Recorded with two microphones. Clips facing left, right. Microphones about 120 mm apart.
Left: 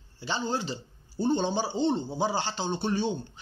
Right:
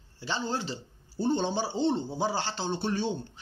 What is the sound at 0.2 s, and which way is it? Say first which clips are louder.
A man's voice: left 1 dB; 5° left (ahead or behind).